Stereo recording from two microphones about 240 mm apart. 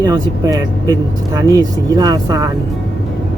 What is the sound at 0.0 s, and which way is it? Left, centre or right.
Speech, centre.